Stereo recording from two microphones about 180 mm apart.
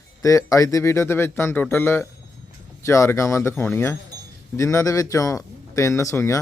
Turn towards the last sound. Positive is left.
turn(degrees=15)  # may be behind; listen again after turning